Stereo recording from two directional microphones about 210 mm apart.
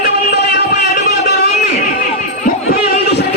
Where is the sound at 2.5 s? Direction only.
45° left (ahead or behind).